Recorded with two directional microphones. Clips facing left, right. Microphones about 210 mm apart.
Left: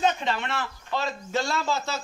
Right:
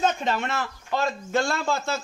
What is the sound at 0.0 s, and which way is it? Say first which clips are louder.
A man's voice: right 1 dB; 45° right (ahead or behind).